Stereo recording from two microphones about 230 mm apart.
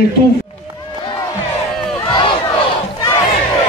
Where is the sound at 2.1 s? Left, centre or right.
Centre.